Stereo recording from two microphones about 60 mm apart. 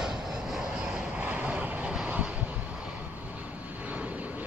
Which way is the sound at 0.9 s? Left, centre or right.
Right.